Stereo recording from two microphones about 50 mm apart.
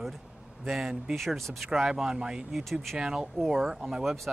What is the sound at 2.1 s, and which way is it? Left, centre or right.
Speech, centre.